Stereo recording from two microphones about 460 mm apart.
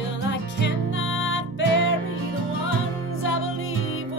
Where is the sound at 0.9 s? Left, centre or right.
Left.